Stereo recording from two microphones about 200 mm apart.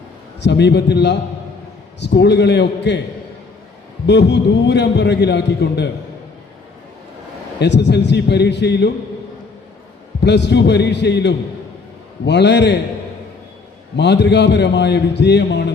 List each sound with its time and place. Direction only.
0.3 s a man's voice: 60° left (ahead or behind)
4.0 s a man's voice: 60° left (ahead or behind)
7.6 s a man's voice: 60° left (ahead or behind)
10.2 s a man's voice: 60° left (ahead or behind)
13.9 s a man's voice: 60° left (ahead or behind)